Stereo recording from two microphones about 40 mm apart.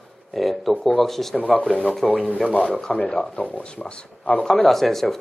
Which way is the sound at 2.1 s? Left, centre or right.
Right.